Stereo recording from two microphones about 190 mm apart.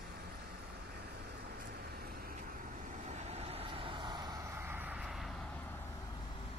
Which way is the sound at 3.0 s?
35° right (ahead or behind).